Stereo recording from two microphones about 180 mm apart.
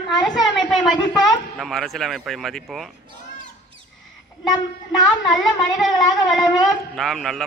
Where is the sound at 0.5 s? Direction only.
Centre (ahead or behind).